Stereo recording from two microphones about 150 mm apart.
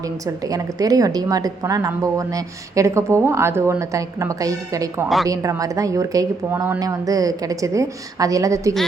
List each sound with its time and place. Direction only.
0.0 s a woman's voice: 25° right (ahead or behind)